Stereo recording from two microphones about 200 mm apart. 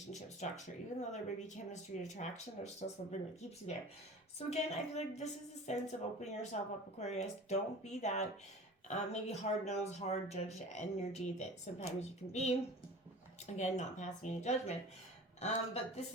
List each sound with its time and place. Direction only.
0.1 s a sound: 35° left (ahead or behind)
1.1 s speech: 35° left (ahead or behind)
4.4 s speech: 30° left (ahead or behind)
13.6 s speech: 35° left (ahead or behind)